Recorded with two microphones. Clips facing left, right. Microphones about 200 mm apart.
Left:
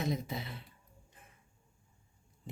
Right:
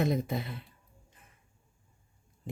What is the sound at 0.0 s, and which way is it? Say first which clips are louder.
Speech: right 6 dB; 55° right (ahead or behind).